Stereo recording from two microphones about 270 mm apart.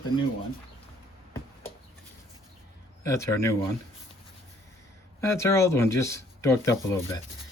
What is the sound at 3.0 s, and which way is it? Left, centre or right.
Speech, centre.